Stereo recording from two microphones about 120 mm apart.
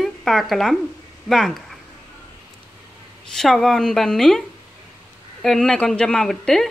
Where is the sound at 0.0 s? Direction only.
Centre (ahead or behind).